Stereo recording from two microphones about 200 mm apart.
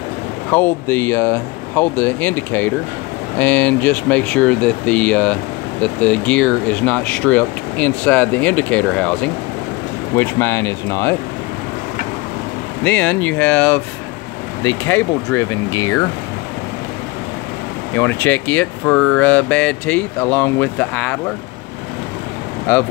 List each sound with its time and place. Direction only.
0.5 s speech: 10° left (ahead or behind)
12.8 s speech: 10° left (ahead or behind)
17.9 s speech: 10° left (ahead or behind)